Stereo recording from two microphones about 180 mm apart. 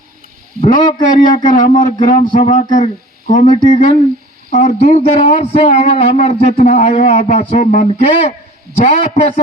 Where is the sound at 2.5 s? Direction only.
45° left (ahead or behind).